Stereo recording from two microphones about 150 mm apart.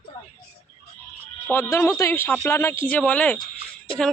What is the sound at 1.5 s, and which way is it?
Speech, 15° left (ahead or behind).